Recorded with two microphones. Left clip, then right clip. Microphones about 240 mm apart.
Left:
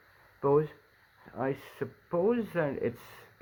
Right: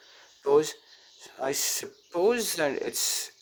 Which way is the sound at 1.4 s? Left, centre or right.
Right.